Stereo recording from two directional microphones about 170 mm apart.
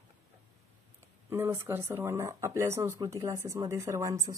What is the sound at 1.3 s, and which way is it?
Speech, 15° right (ahead or behind).